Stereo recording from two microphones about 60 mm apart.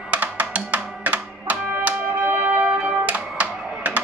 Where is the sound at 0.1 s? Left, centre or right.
Right.